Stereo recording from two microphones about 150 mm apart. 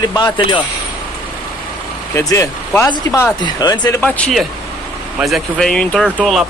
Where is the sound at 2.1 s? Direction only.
20° left (ahead or behind).